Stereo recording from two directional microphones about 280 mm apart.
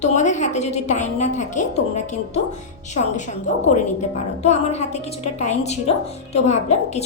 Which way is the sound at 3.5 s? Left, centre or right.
Left.